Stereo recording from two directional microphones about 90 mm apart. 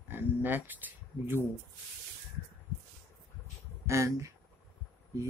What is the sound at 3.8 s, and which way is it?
Speech, 35° right (ahead or behind).